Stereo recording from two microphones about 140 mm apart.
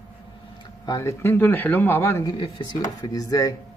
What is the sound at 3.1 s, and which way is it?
Speech, 25° left (ahead or behind).